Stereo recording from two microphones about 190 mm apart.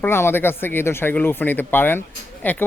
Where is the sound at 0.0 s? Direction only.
10° left (ahead or behind).